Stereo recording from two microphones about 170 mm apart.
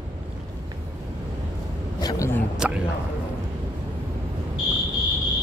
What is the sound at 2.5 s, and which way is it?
Speech, 5° right (ahead or behind).